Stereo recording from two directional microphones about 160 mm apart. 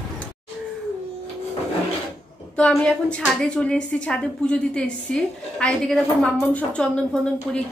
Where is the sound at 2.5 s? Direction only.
5° left (ahead or behind).